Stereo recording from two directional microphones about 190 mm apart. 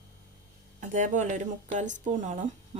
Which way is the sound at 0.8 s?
40° right (ahead or behind).